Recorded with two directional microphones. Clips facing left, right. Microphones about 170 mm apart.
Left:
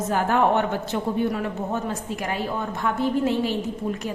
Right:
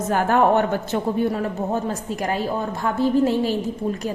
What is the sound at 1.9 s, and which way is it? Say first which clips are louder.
A woman's voice: right 3 dB; 40° right (ahead or behind).